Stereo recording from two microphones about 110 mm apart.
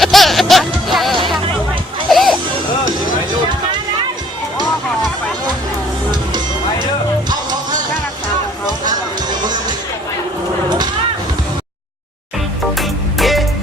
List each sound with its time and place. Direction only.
0.0 s music: centre (ahead or behind)
6.1 s music: 40° right (ahead or behind)
8.8 s music: 40° right (ahead or behind)
12.7 s music: centre (ahead or behind)